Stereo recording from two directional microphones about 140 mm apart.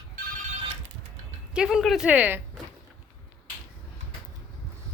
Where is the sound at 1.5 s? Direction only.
5° right (ahead or behind).